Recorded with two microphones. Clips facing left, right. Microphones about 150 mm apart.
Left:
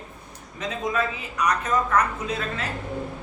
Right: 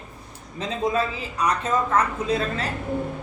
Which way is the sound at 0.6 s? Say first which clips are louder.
Right 2 dB; 30° right (ahead or behind).